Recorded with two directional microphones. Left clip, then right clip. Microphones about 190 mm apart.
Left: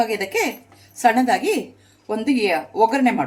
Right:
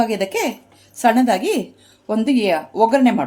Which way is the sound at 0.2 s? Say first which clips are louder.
Right 1 dB; 45° right (ahead or behind).